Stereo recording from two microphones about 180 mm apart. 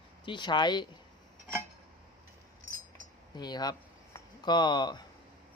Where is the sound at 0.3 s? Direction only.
25° left (ahead or behind).